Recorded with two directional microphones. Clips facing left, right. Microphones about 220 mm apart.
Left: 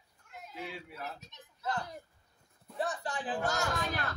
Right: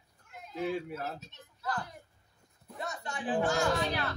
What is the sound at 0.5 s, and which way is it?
Speech, 45° right (ahead or behind).